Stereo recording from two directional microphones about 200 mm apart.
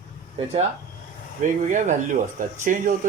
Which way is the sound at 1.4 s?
40° right (ahead or behind).